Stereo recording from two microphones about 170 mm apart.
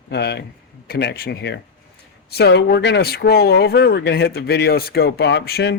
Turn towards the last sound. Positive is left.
turn(degrees=75)  # may be behind; listen again after turning